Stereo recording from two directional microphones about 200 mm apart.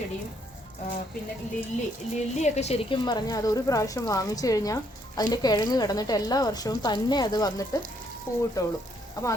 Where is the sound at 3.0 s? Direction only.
20° left (ahead or behind).